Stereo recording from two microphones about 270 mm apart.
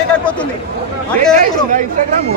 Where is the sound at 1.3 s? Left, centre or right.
Right.